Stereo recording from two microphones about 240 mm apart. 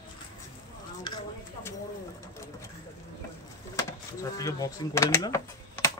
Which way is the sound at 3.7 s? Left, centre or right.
Centre.